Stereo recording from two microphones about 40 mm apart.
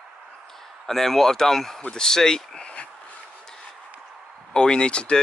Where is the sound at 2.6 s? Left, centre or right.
Left.